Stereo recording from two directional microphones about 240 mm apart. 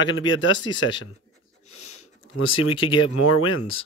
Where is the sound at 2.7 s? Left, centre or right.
Left.